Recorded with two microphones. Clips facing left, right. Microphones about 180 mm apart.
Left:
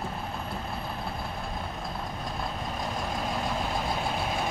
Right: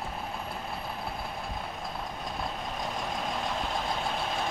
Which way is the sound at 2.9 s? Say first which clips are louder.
Left 3 dB; 5° left (ahead or behind).